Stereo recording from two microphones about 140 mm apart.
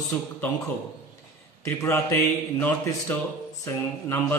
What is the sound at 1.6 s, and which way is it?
A man's voice, 20° left (ahead or behind).